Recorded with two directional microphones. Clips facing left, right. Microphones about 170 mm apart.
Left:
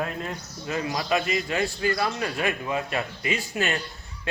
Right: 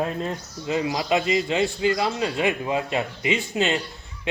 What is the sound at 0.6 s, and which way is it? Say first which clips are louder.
A man's voice: right 4 dB; 20° right (ahead or behind).